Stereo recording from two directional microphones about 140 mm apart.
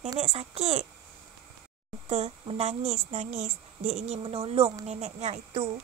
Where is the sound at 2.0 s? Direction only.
50° right (ahead or behind).